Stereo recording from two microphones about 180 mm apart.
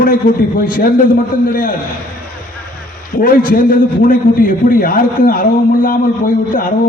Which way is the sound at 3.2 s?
50° left (ahead or behind).